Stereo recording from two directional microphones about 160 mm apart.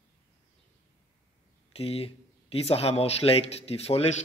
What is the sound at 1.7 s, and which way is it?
Speech, 40° left (ahead or behind).